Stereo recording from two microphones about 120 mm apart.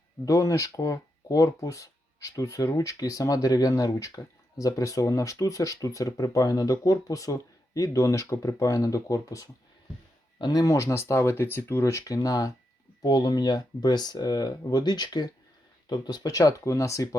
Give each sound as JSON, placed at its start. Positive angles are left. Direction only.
{"t": 0.3, "sound": "speech", "side_deg": 25}